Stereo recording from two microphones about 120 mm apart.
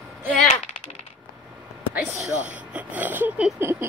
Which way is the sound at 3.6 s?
20° right (ahead or behind).